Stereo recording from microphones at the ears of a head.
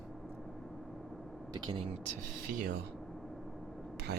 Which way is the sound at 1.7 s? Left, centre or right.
Right.